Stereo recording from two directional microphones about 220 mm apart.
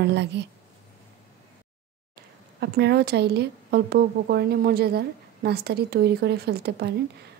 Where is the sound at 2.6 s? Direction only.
50° right (ahead or behind).